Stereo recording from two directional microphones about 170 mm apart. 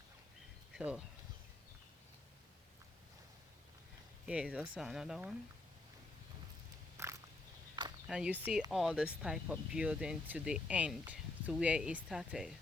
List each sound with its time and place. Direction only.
0.7 s speech: 5° right (ahead or behind)
4.3 s speech: 5° right (ahead or behind)
6.9 s a sound: 15° right (ahead or behind)
8.0 s speech: 5° right (ahead or behind)